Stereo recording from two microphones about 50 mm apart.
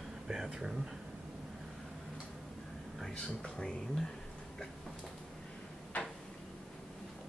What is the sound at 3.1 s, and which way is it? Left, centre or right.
Speech, centre.